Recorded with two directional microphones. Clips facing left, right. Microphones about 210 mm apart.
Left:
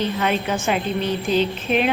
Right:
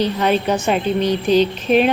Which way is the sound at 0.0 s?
35° right (ahead or behind).